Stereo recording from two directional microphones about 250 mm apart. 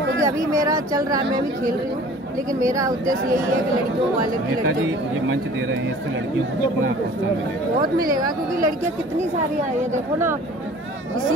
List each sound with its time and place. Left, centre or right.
0.2 s speech: centre